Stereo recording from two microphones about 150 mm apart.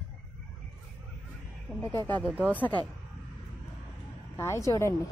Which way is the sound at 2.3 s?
10° right (ahead or behind).